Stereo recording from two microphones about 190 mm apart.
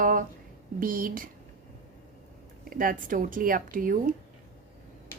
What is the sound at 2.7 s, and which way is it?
A woman's voice, 45° right (ahead or behind).